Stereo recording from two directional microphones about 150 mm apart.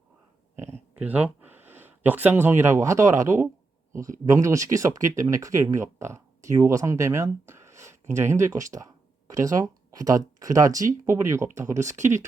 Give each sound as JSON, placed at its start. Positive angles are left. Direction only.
{"t": 0.6, "sound": "speech", "side_deg": -15}